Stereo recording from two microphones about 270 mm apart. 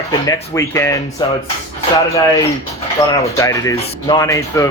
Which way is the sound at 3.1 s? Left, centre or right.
Centre.